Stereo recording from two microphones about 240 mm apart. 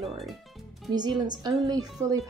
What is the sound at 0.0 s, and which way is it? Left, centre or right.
Speech, centre.